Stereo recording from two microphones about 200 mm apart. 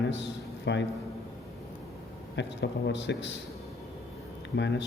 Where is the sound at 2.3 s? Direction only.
60° left (ahead or behind).